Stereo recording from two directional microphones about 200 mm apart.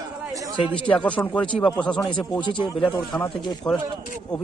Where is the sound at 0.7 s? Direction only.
5° left (ahead or behind).